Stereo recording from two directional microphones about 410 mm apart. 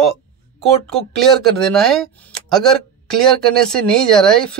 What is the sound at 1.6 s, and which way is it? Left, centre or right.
Speech, centre.